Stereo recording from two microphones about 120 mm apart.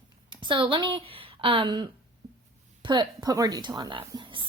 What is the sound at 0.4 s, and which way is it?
A woman's voice, 45° right (ahead or behind).